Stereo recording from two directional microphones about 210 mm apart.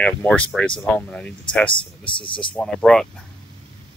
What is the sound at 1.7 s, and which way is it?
Speech, 25° left (ahead or behind).